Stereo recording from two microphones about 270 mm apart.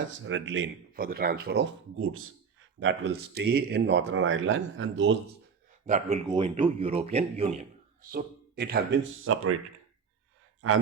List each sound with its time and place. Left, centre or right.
0.1 s speech: right
2.0 s speech: right
2.8 s speech: right
5.8 s speech: right
8.1 s speech: right
9.2 s speech: right